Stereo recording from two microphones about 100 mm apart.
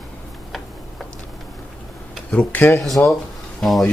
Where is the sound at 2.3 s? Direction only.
15° left (ahead or behind).